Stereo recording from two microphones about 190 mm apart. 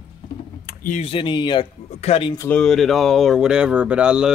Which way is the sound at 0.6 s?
45° left (ahead or behind).